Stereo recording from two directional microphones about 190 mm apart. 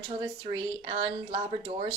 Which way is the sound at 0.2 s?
25° right (ahead or behind).